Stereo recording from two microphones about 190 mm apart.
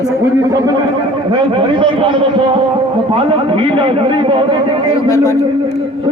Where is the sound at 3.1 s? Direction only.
30° right (ahead or behind).